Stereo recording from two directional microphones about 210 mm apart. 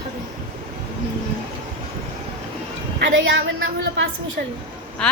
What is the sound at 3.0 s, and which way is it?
A woman's voice, 65° right (ahead or behind).